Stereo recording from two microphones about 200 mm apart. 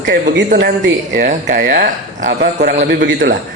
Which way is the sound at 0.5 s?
60° right (ahead or behind).